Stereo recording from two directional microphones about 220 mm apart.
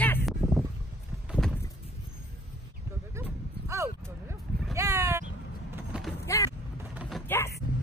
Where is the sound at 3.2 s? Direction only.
10° right (ahead or behind).